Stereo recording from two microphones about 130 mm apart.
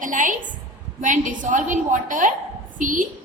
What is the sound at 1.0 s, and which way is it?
A woman's voice, 80° right.